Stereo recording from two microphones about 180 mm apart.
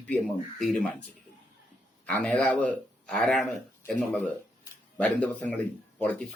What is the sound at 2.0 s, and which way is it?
A man's voice, 10° left (ahead or behind).